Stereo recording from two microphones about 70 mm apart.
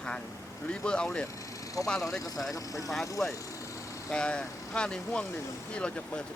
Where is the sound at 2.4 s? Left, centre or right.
Left.